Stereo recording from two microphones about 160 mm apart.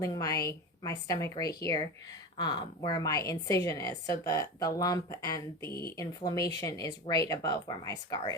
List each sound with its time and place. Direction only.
0.0 s a woman's voice: 20° left (ahead or behind)